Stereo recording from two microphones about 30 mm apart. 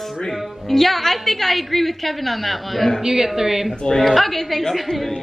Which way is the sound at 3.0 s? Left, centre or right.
Centre.